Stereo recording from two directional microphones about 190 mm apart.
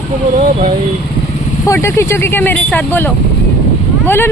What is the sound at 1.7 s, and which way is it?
Speech, 15° left (ahead or behind).